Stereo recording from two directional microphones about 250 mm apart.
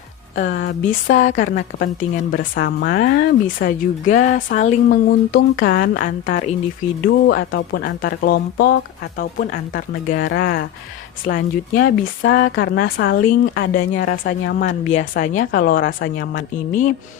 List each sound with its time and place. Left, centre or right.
0.3 s a woman's voice: left
2.3 s speech: left